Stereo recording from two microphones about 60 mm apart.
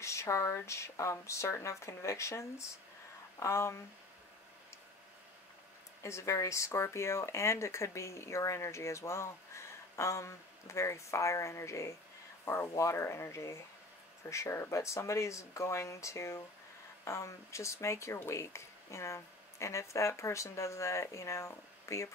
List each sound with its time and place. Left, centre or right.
0.0 s a sound: left
0.7 s speech: left
6.0 s speech: left
12.4 s speech: left